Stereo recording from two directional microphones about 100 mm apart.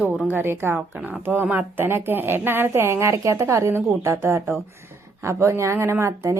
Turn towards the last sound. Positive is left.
turn(degrees=-30)  # may be behind; listen again after turning